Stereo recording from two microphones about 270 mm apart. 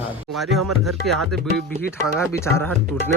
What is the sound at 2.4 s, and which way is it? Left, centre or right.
Speech, centre.